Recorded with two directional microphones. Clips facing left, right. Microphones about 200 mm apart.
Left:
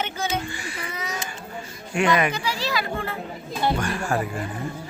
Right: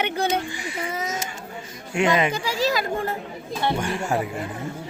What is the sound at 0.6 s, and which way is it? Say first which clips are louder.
Speech: right 4 dB; 25° right (ahead or behind).